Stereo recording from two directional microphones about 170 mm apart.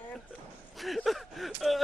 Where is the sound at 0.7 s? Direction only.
Centre (ahead or behind).